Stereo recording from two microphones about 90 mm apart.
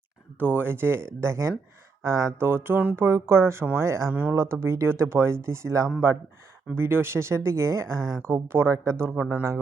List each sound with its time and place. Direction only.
0.3 s speech: 20° right (ahead or behind)
4.1 s speech: 15° right (ahead or behind)
4.4 s speech: 30° right (ahead or behind)